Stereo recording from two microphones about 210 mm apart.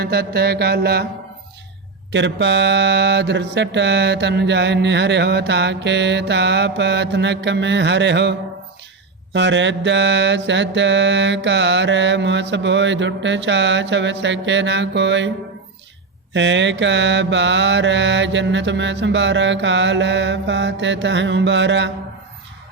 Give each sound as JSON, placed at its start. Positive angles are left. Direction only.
{"t": 0.0, "sound": "mantra", "side_deg": -50}
{"t": 2.1, "sound": "mantra", "side_deg": -60}
{"t": 16.3, "sound": "mantra", "side_deg": -60}